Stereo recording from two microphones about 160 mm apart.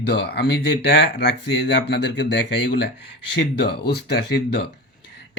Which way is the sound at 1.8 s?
90° left.